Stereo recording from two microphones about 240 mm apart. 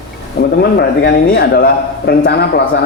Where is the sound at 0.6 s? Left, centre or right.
Left.